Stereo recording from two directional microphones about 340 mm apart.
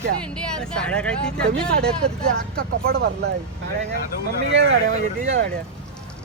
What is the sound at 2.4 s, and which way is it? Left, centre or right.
Speech, right.